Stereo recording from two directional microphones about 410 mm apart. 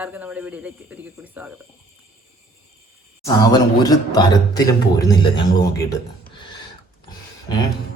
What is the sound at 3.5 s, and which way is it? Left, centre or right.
A man's voice, centre.